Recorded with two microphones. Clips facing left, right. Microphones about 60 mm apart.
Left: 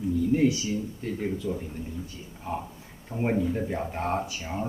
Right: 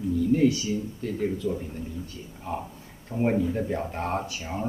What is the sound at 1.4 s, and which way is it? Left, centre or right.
Speech, centre.